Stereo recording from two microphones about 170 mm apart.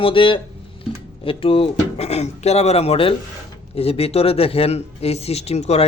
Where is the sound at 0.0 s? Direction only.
30° left (ahead or behind).